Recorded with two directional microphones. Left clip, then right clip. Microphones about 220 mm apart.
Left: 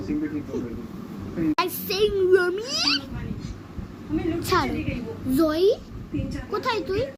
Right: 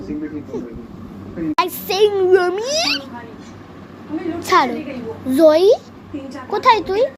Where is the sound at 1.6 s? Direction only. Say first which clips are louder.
Right 10 dB; 10° left (ahead or behind).